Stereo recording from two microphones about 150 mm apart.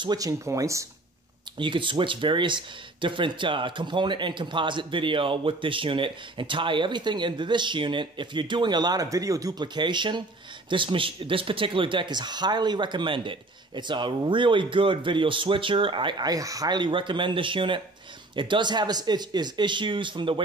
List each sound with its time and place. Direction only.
0.0 s speech: 25° right (ahead or behind)
1.6 s speech: 35° right (ahead or behind)